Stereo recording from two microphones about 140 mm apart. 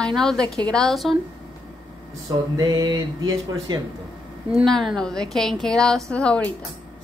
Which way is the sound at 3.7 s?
30° right (ahead or behind).